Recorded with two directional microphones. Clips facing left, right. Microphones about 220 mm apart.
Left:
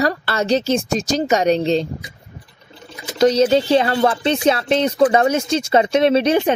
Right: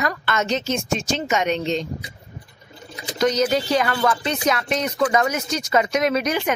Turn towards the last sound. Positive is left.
turn(degrees=30)  # may be behind; listen again after turning